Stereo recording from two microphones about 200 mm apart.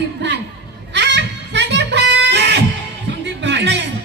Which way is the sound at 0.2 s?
60° right (ahead or behind).